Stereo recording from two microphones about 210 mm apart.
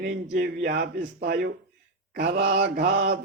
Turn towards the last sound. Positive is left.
turn(degrees=-50)  # may be behind; listen again after turning